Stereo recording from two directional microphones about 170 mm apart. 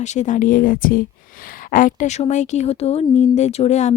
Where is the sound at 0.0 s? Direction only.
45° left (ahead or behind).